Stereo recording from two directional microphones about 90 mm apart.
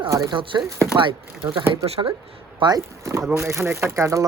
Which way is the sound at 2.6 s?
60° right (ahead or behind).